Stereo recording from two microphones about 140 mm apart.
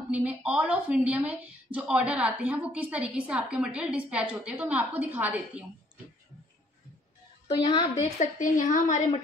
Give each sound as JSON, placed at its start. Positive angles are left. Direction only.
{"t": 0.1, "sound": "a woman's voice", "side_deg": -10}
{"t": 7.4, "sound": "a woman's voice", "side_deg": 35}
{"t": 8.0, "sound": "a woman's voice", "side_deg": 60}